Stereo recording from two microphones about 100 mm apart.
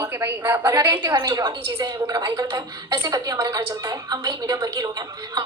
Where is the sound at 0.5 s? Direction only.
40° right (ahead or behind).